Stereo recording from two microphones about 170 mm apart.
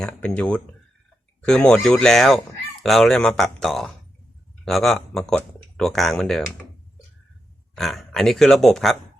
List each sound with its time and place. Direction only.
0.0 s speech: 5° left (ahead or behind)
7.8 s speech: centre (ahead or behind)